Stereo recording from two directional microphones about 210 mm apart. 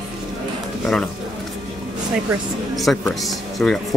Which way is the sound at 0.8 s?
5° left (ahead or behind).